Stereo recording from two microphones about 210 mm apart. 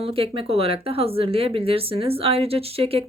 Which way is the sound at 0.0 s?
25° right (ahead or behind).